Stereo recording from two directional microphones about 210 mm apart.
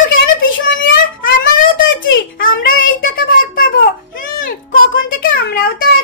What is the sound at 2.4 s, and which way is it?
A child's voice, 40° left (ahead or behind).